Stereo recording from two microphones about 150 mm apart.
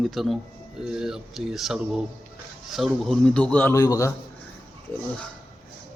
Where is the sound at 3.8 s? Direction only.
20° left (ahead or behind).